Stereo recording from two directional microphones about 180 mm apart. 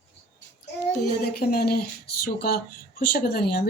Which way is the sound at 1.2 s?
60° left (ahead or behind).